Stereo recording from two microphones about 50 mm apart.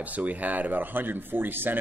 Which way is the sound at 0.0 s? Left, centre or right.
Right.